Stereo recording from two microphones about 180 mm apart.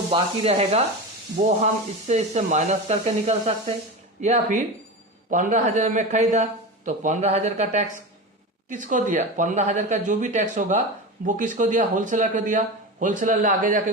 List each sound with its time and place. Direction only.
0.1 s a man's voice: 35° right (ahead or behind)